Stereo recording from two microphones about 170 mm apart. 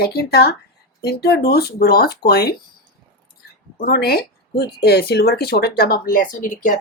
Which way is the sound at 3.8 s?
65° left (ahead or behind).